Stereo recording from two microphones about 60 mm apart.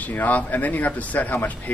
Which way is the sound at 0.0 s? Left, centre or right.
Left.